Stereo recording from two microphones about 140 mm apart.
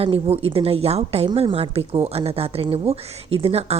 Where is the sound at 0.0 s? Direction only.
40° right (ahead or behind).